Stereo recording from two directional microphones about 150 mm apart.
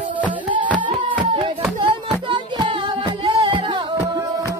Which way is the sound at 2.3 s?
35° right (ahead or behind).